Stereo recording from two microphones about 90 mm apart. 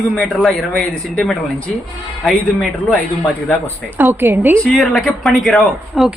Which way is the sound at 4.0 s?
25° right (ahead or behind).